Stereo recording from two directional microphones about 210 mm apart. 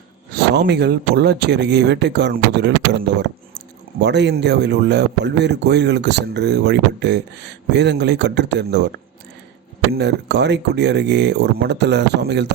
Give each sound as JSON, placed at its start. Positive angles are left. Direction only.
{"t": 0.5, "sound": "speech", "side_deg": -55}
{"t": 9.9, "sound": "speech", "side_deg": -55}